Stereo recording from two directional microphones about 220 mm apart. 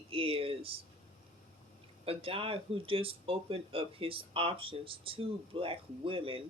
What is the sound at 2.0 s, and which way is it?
Speech, 25° right (ahead or behind).